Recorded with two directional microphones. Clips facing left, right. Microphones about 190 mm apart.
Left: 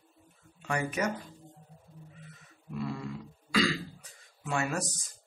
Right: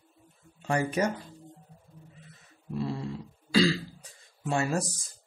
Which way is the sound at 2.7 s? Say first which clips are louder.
Right 3 dB; 30° right (ahead or behind).